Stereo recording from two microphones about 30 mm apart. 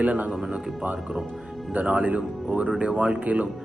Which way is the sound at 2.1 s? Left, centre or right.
Right.